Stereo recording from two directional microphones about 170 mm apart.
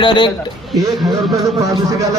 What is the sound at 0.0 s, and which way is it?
Speech, 30° left (ahead or behind).